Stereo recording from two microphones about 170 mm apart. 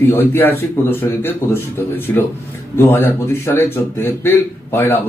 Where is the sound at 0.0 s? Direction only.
10° left (ahead or behind).